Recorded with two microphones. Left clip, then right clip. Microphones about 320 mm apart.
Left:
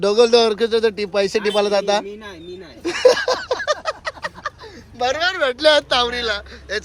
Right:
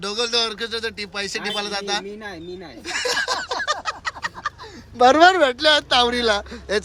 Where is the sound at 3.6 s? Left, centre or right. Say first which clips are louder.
Left 2 dB; centre.